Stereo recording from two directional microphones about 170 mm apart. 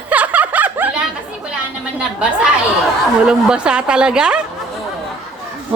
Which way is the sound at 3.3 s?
5° right (ahead or behind).